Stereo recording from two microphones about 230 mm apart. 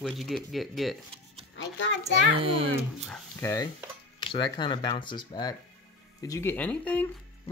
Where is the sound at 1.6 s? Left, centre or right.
Left.